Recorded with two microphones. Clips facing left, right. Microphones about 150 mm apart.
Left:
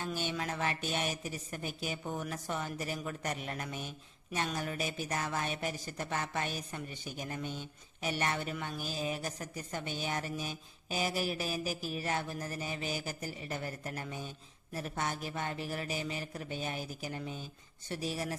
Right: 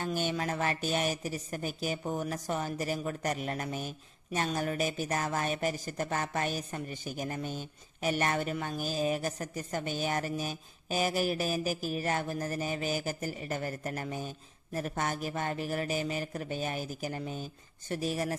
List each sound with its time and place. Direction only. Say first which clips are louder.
0.0 s a woman's voice: right 4 dB; 45° right (ahead or behind)